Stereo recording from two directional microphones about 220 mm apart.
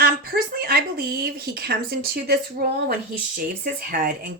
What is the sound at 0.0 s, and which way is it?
Speech, 45° right (ahead or behind).